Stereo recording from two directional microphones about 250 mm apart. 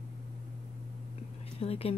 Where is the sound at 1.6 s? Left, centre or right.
Left.